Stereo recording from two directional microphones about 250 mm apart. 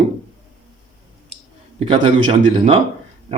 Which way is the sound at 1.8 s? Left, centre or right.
Right.